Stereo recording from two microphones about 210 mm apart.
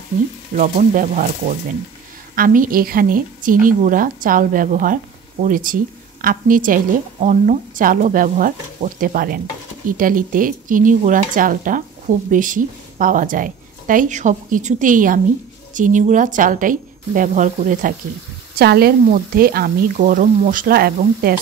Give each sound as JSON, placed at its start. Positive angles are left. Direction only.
{"t": 0.6, "sound": "a woman's voice", "side_deg": -40}
{"t": 2.3, "sound": "a woman's voice", "side_deg": -40}
{"t": 18.6, "sound": "speech", "side_deg": -50}